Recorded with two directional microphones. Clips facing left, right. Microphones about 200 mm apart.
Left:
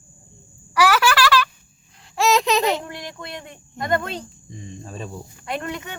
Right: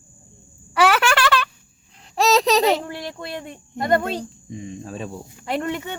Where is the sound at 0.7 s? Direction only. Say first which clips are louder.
Even; 25° right (ahead or behind).